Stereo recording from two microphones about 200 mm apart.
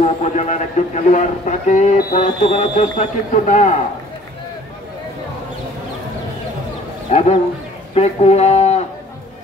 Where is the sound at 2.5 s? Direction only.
30° left (ahead or behind).